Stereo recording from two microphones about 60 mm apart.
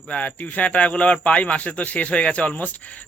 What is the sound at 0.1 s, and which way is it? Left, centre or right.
Speech, left.